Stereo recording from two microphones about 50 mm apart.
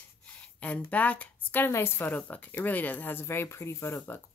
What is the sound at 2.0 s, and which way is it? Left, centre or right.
Speech, left.